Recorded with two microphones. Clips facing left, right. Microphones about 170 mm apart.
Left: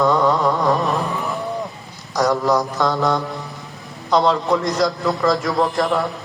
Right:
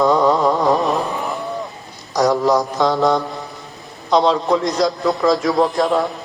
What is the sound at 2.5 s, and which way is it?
A man's voice, 20° right (ahead or behind).